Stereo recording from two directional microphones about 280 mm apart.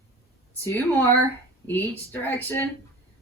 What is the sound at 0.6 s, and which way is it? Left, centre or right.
A woman's voice, centre.